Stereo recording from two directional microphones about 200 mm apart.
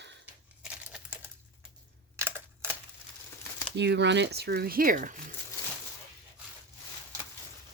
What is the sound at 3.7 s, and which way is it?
Speech, 60° right (ahead or behind).